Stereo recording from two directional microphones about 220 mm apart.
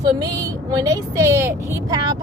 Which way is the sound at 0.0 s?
15° right (ahead or behind).